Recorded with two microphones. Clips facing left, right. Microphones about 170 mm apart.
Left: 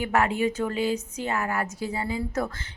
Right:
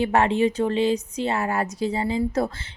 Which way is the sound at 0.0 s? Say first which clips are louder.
Right 4 dB; 30° right (ahead or behind).